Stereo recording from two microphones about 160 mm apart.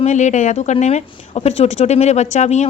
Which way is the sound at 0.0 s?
50° left (ahead or behind).